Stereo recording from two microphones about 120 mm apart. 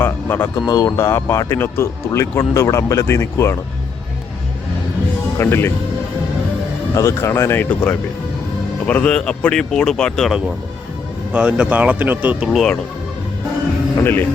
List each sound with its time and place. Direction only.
0.0 s a sound: 15° left (ahead or behind)
0.5 s speech: 35° left (ahead or behind)
5.4 s speech: 20° left (ahead or behind)
6.9 s speech: 25° left (ahead or behind)
8.9 s a man's voice: 10° left (ahead or behind)
11.3 s speech: 10° right (ahead or behind)
12.5 s speech: 5° left (ahead or behind)
13.9 s a man's voice: 15° left (ahead or behind)